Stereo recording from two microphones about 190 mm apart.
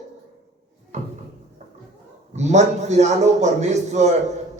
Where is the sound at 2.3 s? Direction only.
35° right (ahead or behind).